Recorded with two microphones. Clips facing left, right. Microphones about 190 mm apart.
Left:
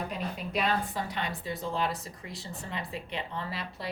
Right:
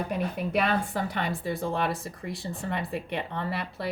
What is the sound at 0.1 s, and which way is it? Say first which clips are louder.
Speech: right 6 dB; 55° right (ahead or behind).